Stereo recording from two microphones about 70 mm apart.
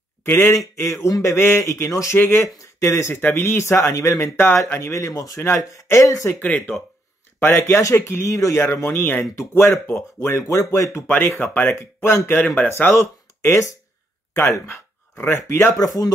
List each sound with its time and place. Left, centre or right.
0.2 s speech: left
1.3 s speech: left
1.6 s speech: left
2.1 s speech: left
3.2 s speech: left
6.4 s speech: left
7.5 s speech: left
8.9 s speech: left
9.2 s speech: left
9.6 s speech: left
11.1 s speech: left
12.9 s speech: left
15.8 s speech: left